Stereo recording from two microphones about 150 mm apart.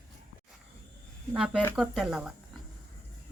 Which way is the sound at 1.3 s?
5° right (ahead or behind).